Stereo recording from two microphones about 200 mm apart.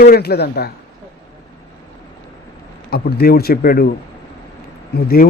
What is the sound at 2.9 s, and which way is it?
Speech, 50° left (ahead or behind).